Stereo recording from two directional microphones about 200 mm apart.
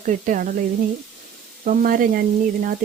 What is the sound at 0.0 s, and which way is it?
Speech, 40° right (ahead or behind).